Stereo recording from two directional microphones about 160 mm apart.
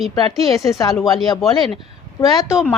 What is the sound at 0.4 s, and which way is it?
Speech, 20° left (ahead or behind).